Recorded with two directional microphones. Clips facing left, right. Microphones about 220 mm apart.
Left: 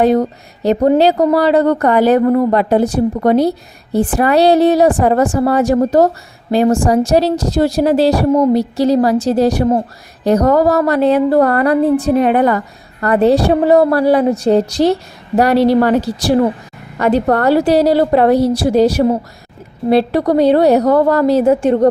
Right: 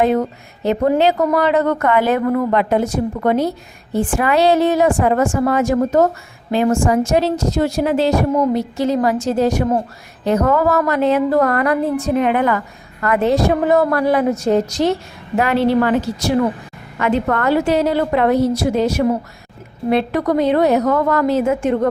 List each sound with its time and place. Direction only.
0.0 s a woman's voice: 35° left (ahead or behind)